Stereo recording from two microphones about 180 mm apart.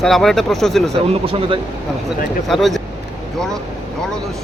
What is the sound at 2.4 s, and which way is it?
Speech, centre (ahead or behind).